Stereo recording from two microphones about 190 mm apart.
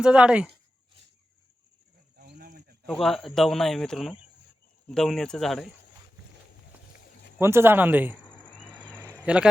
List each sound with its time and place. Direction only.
0.0 s speech: 5° right (ahead or behind)
2.1 s a sound: 55° right (ahead or behind)
2.8 s speech: centre (ahead or behind)
7.3 s speech: 10° right (ahead or behind)
8.2 s cricket: 5° left (ahead or behind)
9.0 s a sound: 10° right (ahead or behind)